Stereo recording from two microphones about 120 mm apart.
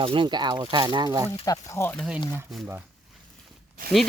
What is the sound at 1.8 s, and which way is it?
Speech, 15° left (ahead or behind).